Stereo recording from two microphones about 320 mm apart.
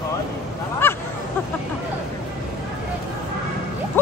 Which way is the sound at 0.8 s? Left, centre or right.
Centre.